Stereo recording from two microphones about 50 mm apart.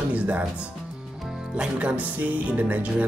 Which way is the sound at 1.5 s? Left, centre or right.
Right.